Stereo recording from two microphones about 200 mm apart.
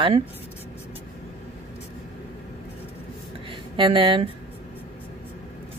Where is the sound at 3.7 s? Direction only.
25° right (ahead or behind).